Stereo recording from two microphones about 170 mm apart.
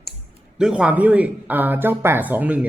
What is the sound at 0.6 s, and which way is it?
Speech, 5° right (ahead or behind).